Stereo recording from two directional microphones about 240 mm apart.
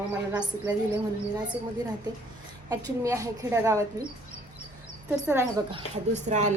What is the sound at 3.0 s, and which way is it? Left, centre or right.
Speech, centre.